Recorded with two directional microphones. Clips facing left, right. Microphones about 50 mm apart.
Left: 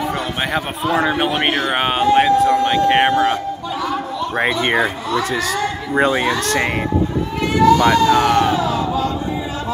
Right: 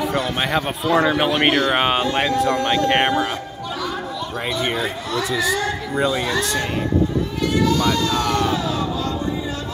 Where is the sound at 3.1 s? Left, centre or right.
Left.